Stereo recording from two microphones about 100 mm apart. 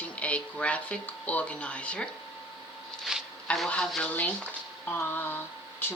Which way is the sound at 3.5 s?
10° left (ahead or behind).